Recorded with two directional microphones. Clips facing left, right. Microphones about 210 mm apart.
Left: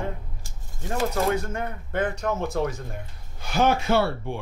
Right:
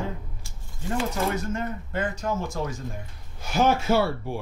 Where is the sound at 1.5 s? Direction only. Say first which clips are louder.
Left 1 dB; 60° left (ahead or behind).